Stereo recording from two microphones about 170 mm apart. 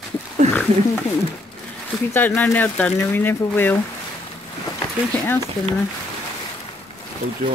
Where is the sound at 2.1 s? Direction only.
10° left (ahead or behind).